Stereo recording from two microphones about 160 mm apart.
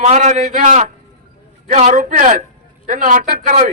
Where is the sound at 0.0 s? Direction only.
45° right (ahead or behind).